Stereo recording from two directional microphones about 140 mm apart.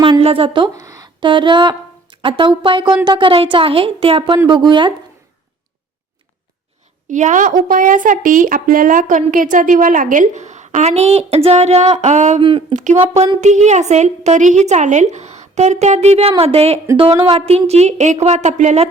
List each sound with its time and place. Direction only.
0.0 s speech: 40° right (ahead or behind)
0.8 s speech: 25° right (ahead or behind)
7.1 s a woman's voice: 60° right (ahead or behind)
12.4 s speech: 40° right (ahead or behind)
12.7 s a woman's voice: 60° right (ahead or behind)